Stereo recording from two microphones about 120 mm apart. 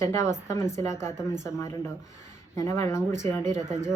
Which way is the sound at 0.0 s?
25° left (ahead or behind).